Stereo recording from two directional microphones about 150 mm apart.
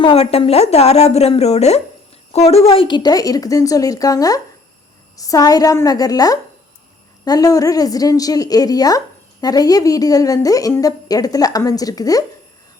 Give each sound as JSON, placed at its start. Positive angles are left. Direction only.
{"t": 0.0, "sound": "a woman's voice", "side_deg": 40}